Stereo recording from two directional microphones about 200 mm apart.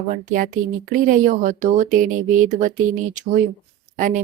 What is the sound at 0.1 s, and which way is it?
Speech, 40° right (ahead or behind).